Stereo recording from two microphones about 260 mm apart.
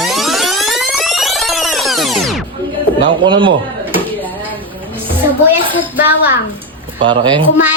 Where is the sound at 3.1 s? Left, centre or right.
Centre.